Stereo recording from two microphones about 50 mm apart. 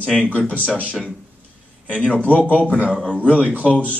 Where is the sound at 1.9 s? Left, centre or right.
Left.